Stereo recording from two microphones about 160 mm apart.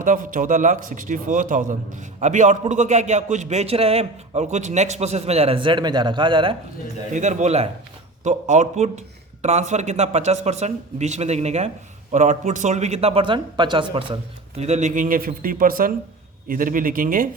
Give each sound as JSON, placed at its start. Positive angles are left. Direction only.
{"t": 0.0, "sound": "speech", "side_deg": -55}
{"t": 7.1, "sound": "a man's voice", "side_deg": -50}
{"t": 14.6, "sound": "a man's voice", "side_deg": -45}